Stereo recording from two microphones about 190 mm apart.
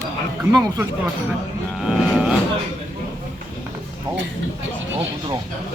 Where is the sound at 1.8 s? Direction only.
5° right (ahead or behind).